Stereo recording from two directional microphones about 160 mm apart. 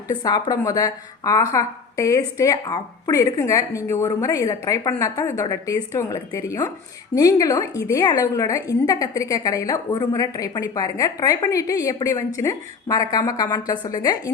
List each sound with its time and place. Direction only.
0.1 s a woman's voice: 25° left (ahead or behind)